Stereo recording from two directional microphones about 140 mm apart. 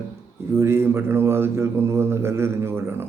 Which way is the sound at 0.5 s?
20° right (ahead or behind).